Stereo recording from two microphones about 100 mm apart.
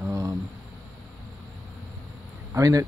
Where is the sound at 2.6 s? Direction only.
35° right (ahead or behind).